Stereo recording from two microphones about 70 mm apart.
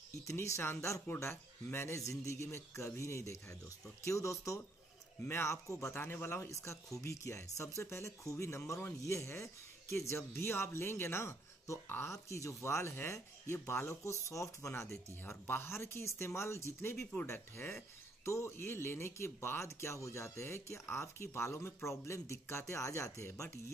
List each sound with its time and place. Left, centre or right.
0.2 s a man's voice: left
5.9 s speech: left
6.5 s a man's voice: left
17.0 s speech: left